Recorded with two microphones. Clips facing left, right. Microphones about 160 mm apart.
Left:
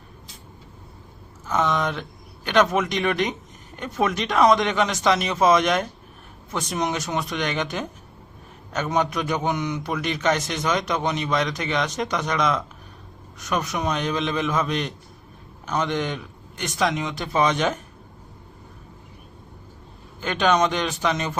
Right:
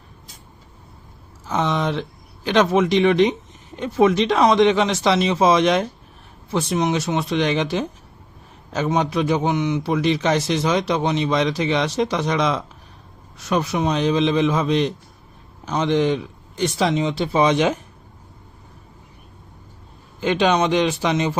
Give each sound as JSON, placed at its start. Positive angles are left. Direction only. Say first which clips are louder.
{"t": 1.5, "sound": "a man's voice", "louder": "right 1 dB", "side_deg": -30}
{"t": 20.2, "sound": "a man's voice", "louder": "right 3 dB", "side_deg": -30}